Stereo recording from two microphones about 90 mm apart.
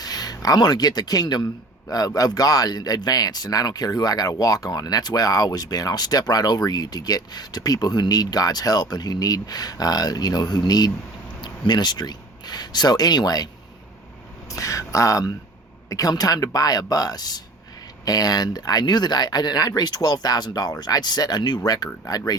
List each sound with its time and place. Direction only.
0.0 s speech: 45° left (ahead or behind)
14.5 s speech: 35° left (ahead or behind)